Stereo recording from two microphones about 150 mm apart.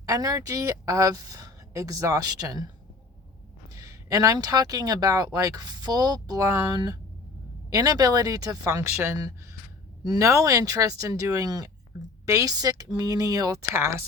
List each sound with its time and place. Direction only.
0.0 s speech: 25° right (ahead or behind)
3.7 s speech: 20° right (ahead or behind)